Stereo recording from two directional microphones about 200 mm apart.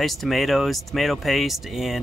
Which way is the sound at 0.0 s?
Centre (ahead or behind).